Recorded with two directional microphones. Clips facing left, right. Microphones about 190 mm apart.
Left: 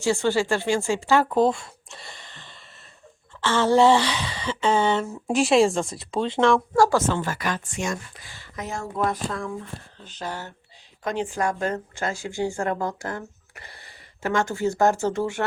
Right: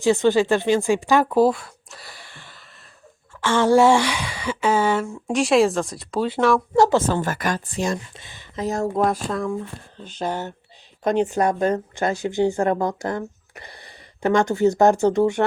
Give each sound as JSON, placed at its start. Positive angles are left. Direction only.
{"t": 0.0, "sound": "a woman's voice", "side_deg": -20}
{"t": 2.1, "sound": "a sound", "side_deg": -10}
{"t": 3.4, "sound": "speech", "side_deg": -15}
{"t": 6.7, "sound": "speech", "side_deg": -25}
{"t": 7.1, "sound": "speech", "side_deg": -45}
{"t": 8.2, "sound": "a sound", "side_deg": -20}
{"t": 8.6, "sound": "speech", "side_deg": -40}
{"t": 10.0, "sound": "speech", "side_deg": -20}
{"t": 11.0, "sound": "speech", "side_deg": -50}
{"t": 11.3, "sound": "a woman's voice", "side_deg": -20}